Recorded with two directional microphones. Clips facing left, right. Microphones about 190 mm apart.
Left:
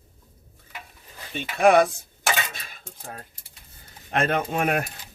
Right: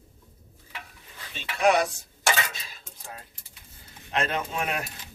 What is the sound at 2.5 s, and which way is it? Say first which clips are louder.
Cutlery: left 2 dB; 55° left (ahead or behind).